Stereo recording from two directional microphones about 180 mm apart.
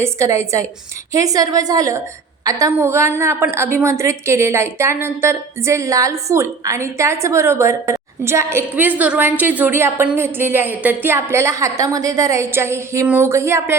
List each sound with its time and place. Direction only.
0.0 s a woman's voice: 15° right (ahead or behind)